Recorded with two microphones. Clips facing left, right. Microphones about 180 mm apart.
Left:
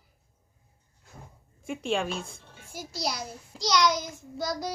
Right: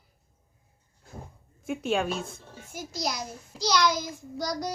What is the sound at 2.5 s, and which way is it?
Music, 45° right (ahead or behind).